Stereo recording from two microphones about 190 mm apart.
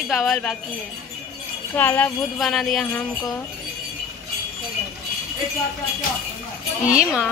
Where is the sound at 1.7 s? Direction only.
10° left (ahead or behind).